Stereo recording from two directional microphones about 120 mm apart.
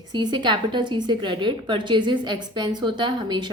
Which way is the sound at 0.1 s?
40° right (ahead or behind).